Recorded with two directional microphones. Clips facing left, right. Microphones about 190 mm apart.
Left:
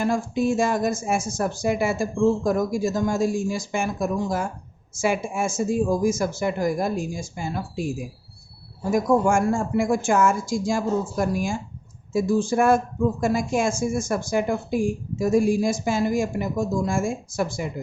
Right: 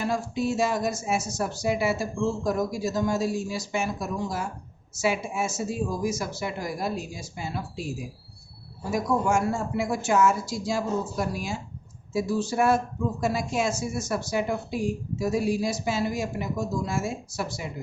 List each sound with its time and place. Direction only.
0.0 s speech: 50° left (ahead or behind)